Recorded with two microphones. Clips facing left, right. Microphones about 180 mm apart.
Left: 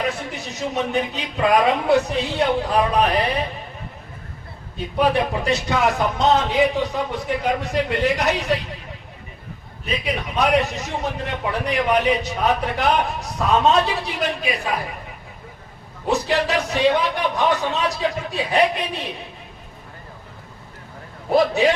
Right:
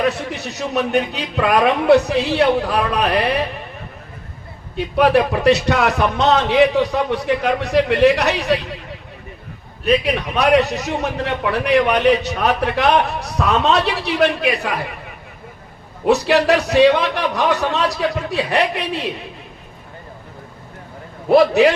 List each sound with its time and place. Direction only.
0.0 s a man's voice: 70° right (ahead or behind)
4.8 s a man's voice: 75° right (ahead or behind)
10.3 s a man's voice: 75° right (ahead or behind)
16.0 s a man's voice: 75° right (ahead or behind)
21.2 s a man's voice: 70° right (ahead or behind)